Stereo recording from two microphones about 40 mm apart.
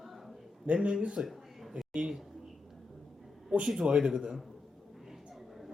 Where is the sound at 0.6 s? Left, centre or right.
Right.